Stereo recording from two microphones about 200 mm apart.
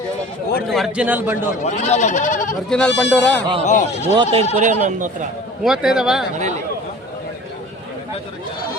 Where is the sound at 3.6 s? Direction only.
35° left (ahead or behind).